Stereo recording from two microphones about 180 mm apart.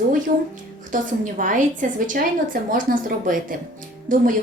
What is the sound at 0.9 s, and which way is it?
A woman's voice, 45° right (ahead or behind).